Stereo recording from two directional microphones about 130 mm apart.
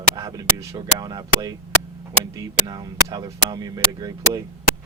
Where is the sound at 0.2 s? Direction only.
25° right (ahead or behind).